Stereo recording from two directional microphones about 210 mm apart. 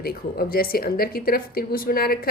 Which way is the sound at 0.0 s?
45° left (ahead or behind).